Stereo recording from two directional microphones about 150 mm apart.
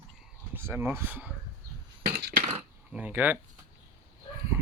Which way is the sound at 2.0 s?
90° right.